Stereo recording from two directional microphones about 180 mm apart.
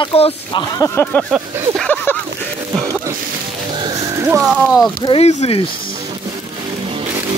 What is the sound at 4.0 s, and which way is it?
Music, 20° right (ahead or behind).